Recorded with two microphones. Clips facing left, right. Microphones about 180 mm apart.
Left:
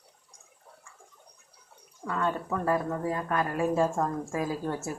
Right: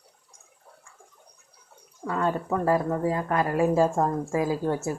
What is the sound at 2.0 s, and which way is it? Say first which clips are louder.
A woman's voice: right 3 dB; 30° right (ahead or behind).